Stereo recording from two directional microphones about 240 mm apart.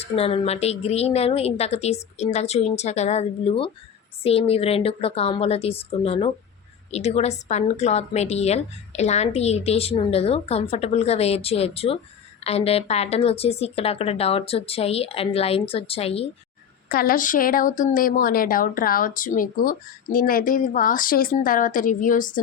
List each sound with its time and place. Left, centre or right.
0.0 s a woman's voice: left
16.9 s a woman's voice: left